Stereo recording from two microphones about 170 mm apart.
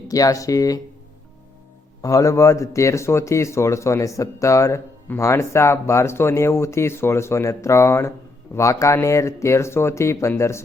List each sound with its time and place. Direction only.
0.1 s speech: 20° left (ahead or behind)
2.0 s speech: 20° left (ahead or behind)